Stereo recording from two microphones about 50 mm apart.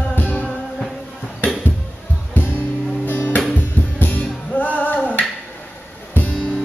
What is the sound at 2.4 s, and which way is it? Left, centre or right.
Music, left.